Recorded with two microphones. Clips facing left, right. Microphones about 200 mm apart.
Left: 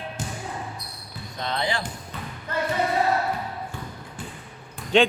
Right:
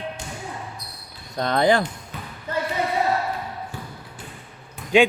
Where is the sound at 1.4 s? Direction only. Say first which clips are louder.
Right 9 dB; 50° right (ahead or behind).